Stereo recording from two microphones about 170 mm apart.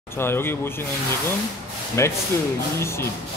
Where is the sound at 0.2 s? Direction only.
15° left (ahead or behind).